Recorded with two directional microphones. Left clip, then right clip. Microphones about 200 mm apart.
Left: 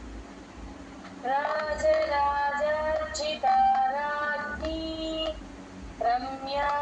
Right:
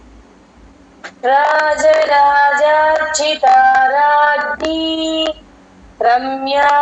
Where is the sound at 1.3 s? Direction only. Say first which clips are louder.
Right 16 dB; 45° right (ahead or behind).